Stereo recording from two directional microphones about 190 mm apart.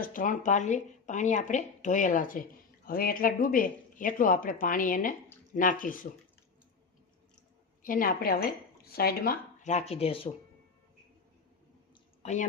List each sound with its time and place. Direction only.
0.0 s speech: 45° left (ahead or behind)
7.8 s speech: 45° left (ahead or behind); by 10.2 s 30° left (ahead or behind)
12.2 s speech: 40° left (ahead or behind)